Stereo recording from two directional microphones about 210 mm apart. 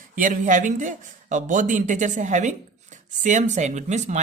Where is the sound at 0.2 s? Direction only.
35° right (ahead or behind).